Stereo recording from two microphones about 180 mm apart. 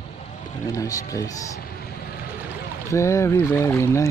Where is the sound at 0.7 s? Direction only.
20° left (ahead or behind).